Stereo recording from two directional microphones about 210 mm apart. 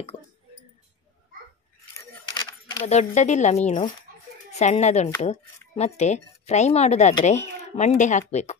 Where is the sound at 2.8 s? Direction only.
30° left (ahead or behind).